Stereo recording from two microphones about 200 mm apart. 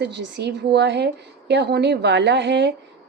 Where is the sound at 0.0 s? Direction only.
60° right (ahead or behind).